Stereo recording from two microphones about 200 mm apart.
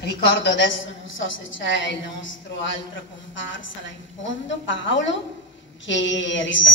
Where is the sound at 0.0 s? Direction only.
60° left (ahead or behind).